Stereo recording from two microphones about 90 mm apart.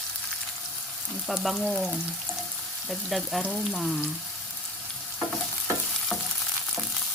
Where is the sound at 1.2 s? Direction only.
Centre (ahead or behind).